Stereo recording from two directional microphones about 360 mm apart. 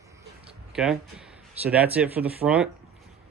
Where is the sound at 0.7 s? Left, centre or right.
Centre.